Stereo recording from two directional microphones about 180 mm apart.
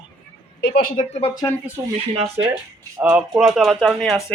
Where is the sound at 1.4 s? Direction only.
15° left (ahead or behind).